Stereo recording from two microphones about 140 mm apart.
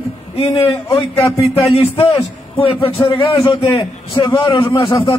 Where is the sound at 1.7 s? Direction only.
40° left (ahead or behind).